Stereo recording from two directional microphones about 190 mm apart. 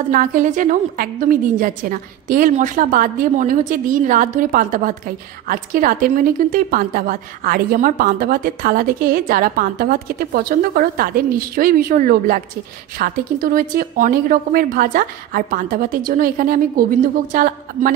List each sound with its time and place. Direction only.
0.1 s a woman's voice: 45° right (ahead or behind)